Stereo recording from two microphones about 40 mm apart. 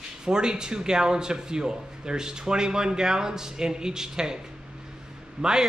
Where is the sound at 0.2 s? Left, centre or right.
Centre.